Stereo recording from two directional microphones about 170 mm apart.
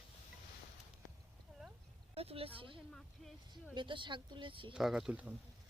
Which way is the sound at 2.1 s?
35° right (ahead or behind).